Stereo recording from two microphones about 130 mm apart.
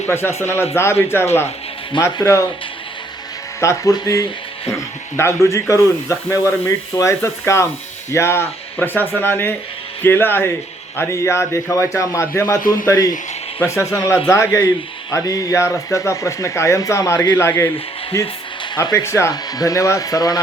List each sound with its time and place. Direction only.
0.0 s speech: 20° left (ahead or behind)
3.6 s speech: 25° left (ahead or behind)
18.8 s speech: 25° left (ahead or behind)